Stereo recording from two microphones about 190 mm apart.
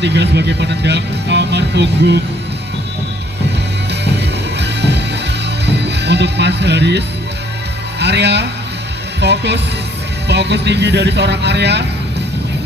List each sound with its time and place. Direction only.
0.0 s speech: 65° right (ahead or behind)
4.6 s music: 65° right (ahead or behind)
5.7 s speech: 65° right (ahead or behind)
8.0 s speech: 60° right (ahead or behind)